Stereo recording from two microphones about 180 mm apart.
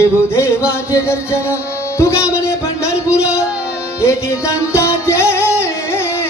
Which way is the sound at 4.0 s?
15° left (ahead or behind).